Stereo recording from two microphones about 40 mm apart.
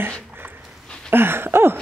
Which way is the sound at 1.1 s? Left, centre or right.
Right.